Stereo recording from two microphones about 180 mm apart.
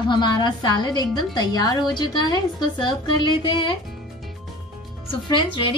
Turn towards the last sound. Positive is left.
turn(degrees=30)  # may be behind; listen again after turning